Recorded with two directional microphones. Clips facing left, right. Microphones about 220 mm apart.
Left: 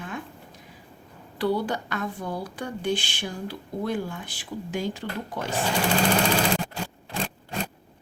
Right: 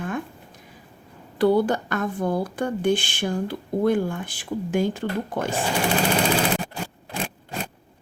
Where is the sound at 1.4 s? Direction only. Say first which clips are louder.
Right 7 dB; 50° right (ahead or behind).